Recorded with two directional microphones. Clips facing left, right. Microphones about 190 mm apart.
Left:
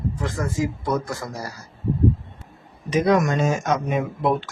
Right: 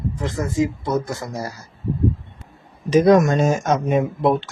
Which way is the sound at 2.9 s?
35° right (ahead or behind).